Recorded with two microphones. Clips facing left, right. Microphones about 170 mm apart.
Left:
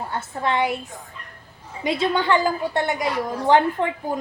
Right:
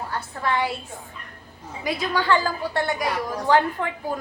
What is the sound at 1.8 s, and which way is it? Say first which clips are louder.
Speech: left 4 dB; 25° left (ahead or behind).